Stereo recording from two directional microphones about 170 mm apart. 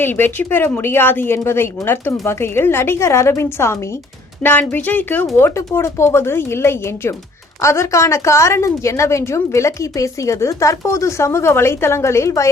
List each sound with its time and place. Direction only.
0.0 s a woman's voice: 10° left (ahead or behind)